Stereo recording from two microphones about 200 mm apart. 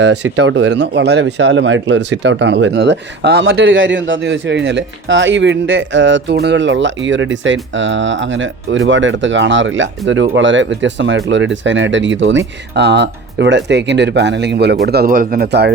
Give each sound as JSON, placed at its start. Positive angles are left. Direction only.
{"t": 0.0, "sound": "speech", "side_deg": -60}